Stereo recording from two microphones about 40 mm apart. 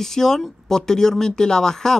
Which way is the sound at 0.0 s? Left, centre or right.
Centre.